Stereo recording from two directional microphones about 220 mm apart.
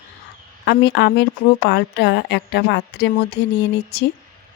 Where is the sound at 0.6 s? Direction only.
50° left (ahead or behind).